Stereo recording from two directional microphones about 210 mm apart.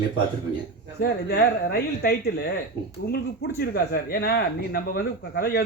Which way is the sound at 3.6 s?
45° left (ahead or behind).